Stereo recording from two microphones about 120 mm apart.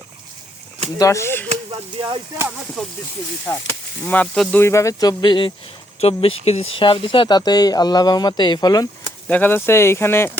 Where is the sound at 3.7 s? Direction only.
15° left (ahead or behind).